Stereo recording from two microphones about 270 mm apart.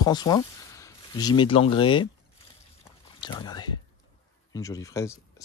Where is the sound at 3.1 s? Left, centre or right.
Centre.